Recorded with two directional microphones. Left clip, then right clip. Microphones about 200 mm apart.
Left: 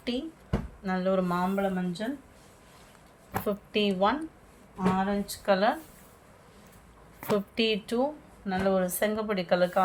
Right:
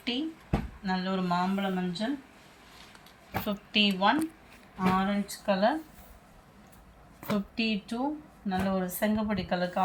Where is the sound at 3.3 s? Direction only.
60° left (ahead or behind).